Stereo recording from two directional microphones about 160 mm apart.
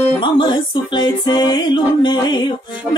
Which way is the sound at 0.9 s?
25° left (ahead or behind).